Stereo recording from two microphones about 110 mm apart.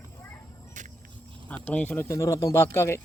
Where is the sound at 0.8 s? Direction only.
90° right.